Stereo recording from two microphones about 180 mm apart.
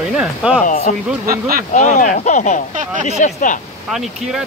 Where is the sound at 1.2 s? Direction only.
55° right (ahead or behind).